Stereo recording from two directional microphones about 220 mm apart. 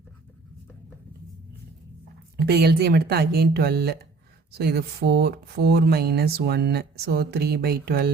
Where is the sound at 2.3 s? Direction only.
45° right (ahead or behind).